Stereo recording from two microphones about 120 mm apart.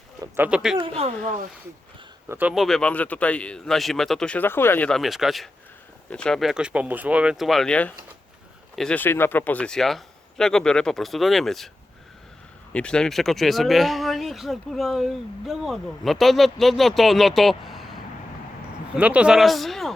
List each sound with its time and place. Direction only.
0.3 s speech: 10° right (ahead or behind)
0.8 s speech: 55° right (ahead or behind)
1.2 s speech: 90° right
2.3 s speech: 15° right (ahead or behind)
2.6 s speech: 5° left (ahead or behind)
4.9 s speech: centre (ahead or behind)
9.0 s speech: 20° left (ahead or behind); by 11.7 s centre (ahead or behind)
12.7 s speech: 10° left (ahead or behind)